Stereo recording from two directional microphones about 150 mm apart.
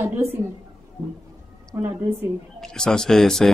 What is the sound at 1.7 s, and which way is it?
Speech, 15° right (ahead or behind).